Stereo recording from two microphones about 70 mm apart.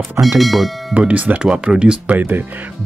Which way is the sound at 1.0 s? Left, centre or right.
Centre.